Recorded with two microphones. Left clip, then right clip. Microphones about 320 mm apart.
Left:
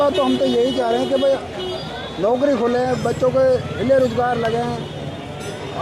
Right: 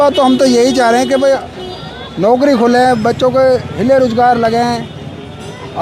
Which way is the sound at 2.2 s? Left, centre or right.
Right.